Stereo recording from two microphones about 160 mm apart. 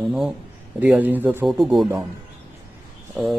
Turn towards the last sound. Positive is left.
turn(degrees=-5)  # may be behind; listen again after turning